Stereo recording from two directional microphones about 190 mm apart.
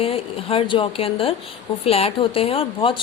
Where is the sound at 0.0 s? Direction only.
30° left (ahead or behind).